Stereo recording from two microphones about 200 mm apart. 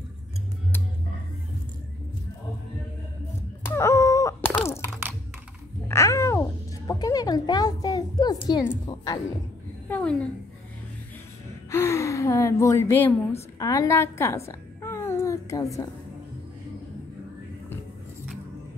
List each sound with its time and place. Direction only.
3.6 s groan: 15° left (ahead or behind)
5.9 s babbling: 15° left (ahead or behind)
6.9 s music: 20° left (ahead or behind)
9.8 s a woman's voice: 10° left (ahead or behind)
11.7 s speech: 15° left (ahead or behind)
13.6 s a sound: 15° left (ahead or behind)